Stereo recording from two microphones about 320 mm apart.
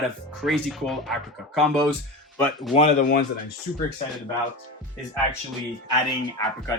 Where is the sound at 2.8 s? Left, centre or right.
Left.